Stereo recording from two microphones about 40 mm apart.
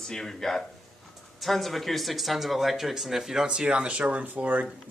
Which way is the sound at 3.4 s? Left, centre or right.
Right.